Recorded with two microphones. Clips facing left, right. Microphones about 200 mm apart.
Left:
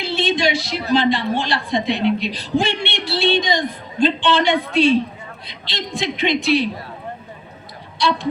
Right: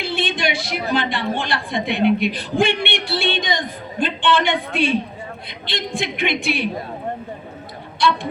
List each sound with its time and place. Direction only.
0.0 s a woman's voice: 55° right (ahead or behind)